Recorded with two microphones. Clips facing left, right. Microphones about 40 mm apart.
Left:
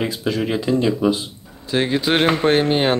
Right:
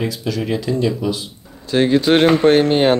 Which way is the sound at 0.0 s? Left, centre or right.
Left.